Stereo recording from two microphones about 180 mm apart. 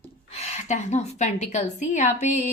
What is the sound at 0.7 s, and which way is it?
Speech, 40° left (ahead or behind).